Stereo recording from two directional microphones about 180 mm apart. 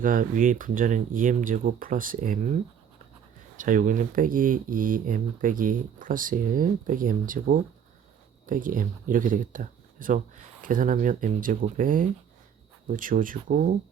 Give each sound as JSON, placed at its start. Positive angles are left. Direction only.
{"t": 0.0, "sound": "speech", "side_deg": -50}
{"t": 3.6, "sound": "speech", "side_deg": -50}